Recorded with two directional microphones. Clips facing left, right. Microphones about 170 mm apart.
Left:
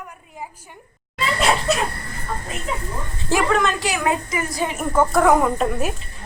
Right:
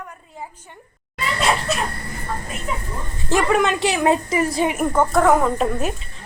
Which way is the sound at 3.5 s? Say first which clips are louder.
Right 2 dB; 15° right (ahead or behind).